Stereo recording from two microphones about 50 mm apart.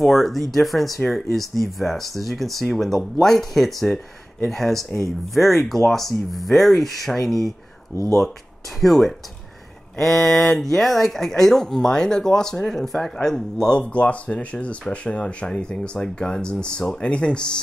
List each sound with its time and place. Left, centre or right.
0.0 s speech: centre
7.9 s speech: left
8.8 s speech: centre
13.9 s speech: left